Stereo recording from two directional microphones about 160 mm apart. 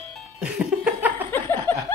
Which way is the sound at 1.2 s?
15° left (ahead or behind).